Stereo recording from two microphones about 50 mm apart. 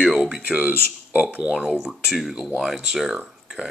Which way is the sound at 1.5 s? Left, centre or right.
Centre.